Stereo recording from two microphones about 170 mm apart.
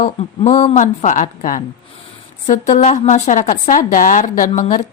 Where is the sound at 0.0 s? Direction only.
40° left (ahead or behind).